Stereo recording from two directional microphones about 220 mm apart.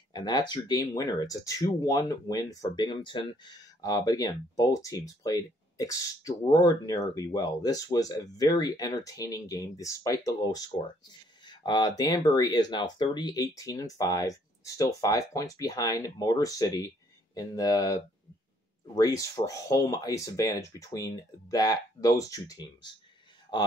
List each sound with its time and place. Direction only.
0.1 s speech: 20° left (ahead or behind)
11.4 s a sound: 20° left (ahead or behind)
12.0 s speech: 15° left (ahead or behind)